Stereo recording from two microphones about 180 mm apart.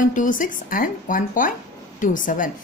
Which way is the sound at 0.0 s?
45° left (ahead or behind).